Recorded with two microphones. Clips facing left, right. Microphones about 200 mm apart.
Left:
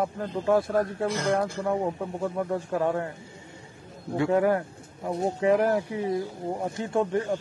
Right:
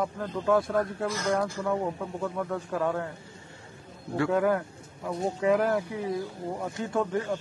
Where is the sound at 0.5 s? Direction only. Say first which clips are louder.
Left 1 dB; 30° left (ahead or behind).